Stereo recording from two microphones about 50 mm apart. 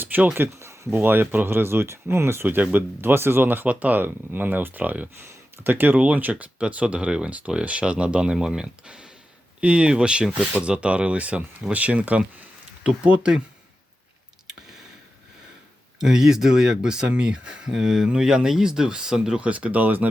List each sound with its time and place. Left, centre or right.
0.0 s a sound: right
0.3 s speech: right
0.9 s speech: right
3.7 s speech: right
16.0 s speech: centre
19.4 s speech: right